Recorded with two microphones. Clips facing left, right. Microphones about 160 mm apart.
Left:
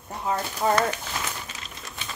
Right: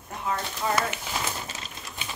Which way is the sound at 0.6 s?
35° left (ahead or behind).